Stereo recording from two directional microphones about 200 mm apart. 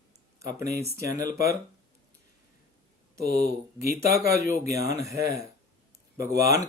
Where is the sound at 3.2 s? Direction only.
55° right (ahead or behind).